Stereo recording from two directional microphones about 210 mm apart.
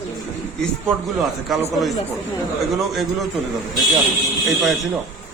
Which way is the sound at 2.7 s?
Centre (ahead or behind).